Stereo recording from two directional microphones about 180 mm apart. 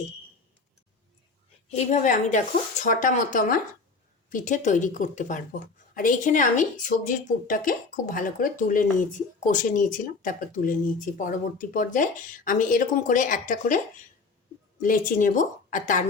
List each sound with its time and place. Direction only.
1.7 s speech: 40° left (ahead or behind)